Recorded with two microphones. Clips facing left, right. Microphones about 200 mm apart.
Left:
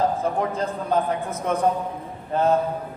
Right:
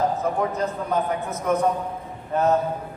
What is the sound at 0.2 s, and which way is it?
Speech, 30° left (ahead or behind).